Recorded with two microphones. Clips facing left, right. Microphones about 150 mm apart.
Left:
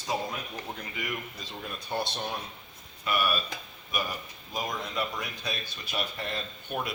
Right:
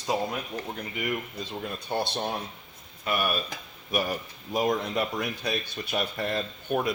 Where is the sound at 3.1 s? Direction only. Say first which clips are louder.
Right 1 dB; 50° right (ahead or behind).